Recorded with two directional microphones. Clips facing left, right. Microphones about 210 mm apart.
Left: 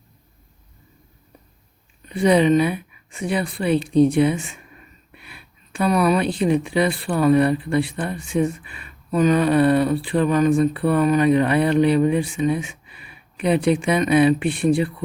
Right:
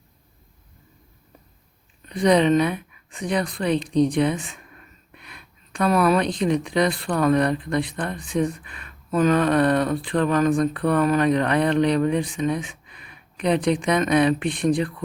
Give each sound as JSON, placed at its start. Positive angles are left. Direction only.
{"t": 2.0, "sound": "a woman's voice", "side_deg": 5}
{"t": 4.4, "sound": "speech", "side_deg": -35}
{"t": 5.1, "sound": "speech", "side_deg": 5}
{"t": 12.4, "sound": "a sound", "side_deg": 5}
{"t": 13.8, "sound": "a woman's voice", "side_deg": 5}